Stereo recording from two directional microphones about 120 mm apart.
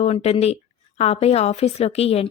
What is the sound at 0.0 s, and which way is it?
Speech, 65° left (ahead or behind).